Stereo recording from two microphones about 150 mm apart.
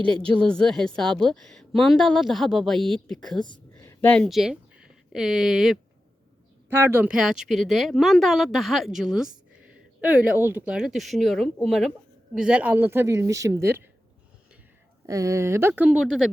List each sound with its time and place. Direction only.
0.0 s a woman's voice: 5° left (ahead or behind)
3.4 s a sound: 30° left (ahead or behind)
3.8 s speech: 10° left (ahead or behind)
6.7 s a woman's voice: 15° right (ahead or behind)
15.0 s a woman's voice: 20° right (ahead or behind); by 16.3 s 5° right (ahead or behind)